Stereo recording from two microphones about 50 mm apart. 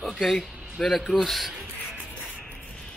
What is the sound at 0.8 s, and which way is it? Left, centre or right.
Speech, centre.